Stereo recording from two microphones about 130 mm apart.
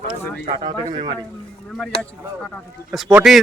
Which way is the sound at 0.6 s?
35° right (ahead or behind).